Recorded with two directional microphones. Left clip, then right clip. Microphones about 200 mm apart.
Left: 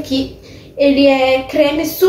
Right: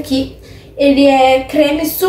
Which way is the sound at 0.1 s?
10° right (ahead or behind).